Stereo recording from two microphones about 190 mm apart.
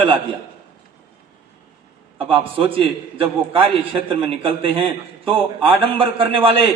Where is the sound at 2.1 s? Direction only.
30° right (ahead or behind).